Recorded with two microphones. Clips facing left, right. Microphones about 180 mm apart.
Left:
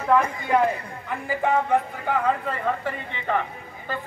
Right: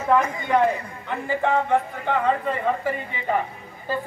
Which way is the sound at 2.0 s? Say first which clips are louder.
Right 2 dB; centre (ahead or behind).